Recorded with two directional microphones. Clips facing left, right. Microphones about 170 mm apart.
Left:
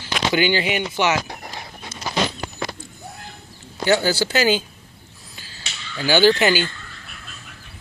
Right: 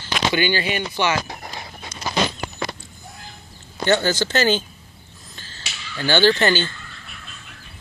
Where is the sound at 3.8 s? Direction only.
10° left (ahead or behind).